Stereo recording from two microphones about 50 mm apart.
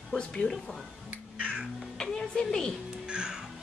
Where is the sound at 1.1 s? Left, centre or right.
Right.